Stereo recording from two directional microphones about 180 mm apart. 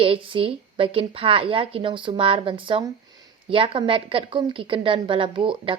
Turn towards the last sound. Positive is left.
turn(degrees=-30)  # may be behind; listen again after turning